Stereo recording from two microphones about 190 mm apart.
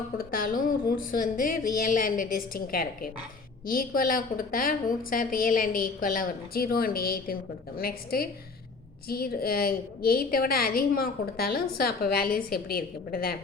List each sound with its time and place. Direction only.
0.2 s a woman's voice: 50° left (ahead or behind)